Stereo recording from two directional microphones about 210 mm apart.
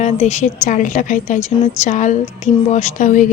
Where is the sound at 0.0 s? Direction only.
35° left (ahead or behind).